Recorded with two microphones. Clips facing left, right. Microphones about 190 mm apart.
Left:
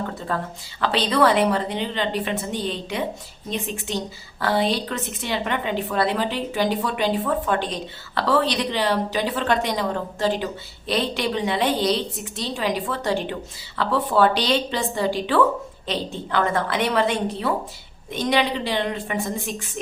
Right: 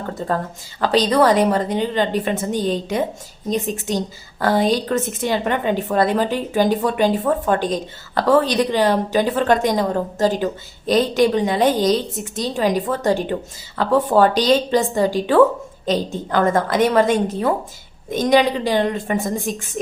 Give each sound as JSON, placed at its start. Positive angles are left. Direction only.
{"t": 0.2, "sound": "a woman's voice", "side_deg": -40}